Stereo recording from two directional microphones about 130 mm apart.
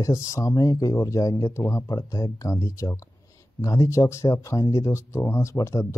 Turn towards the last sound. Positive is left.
turn(degrees=20)  # may be behind; listen again after turning